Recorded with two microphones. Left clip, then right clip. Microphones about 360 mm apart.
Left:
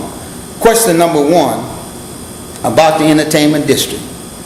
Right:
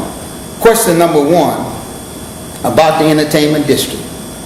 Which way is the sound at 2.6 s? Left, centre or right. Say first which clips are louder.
Even; left.